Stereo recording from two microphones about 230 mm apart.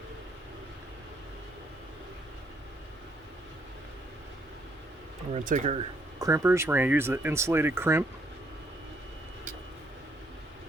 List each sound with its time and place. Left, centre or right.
5.3 s speech: right
6.1 s speech: centre